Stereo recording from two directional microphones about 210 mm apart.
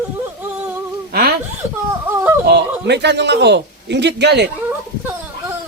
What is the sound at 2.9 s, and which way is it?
A man's voice, 55° right (ahead or behind).